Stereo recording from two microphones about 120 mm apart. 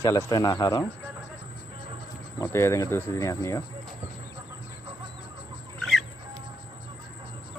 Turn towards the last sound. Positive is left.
turn(degrees=0)  # may be behind; listen again after turning